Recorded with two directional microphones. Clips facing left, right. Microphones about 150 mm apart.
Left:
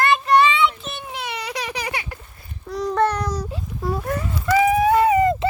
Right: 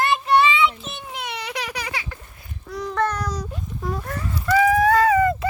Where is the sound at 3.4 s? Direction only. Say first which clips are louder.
Left 3 dB; 10° left (ahead or behind).